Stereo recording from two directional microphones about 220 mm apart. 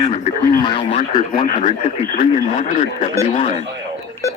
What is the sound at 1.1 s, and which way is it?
Speech, 20° left (ahead or behind).